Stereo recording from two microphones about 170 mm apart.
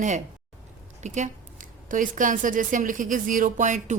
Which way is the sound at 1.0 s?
45° right (ahead or behind).